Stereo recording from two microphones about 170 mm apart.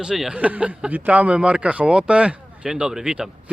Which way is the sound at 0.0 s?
5° right (ahead or behind).